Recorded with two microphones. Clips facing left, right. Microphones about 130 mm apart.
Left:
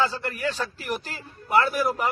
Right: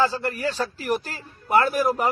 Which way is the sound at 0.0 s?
35° right (ahead or behind).